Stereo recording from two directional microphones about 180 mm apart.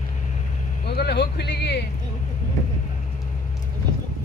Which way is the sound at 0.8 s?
65° left (ahead or behind).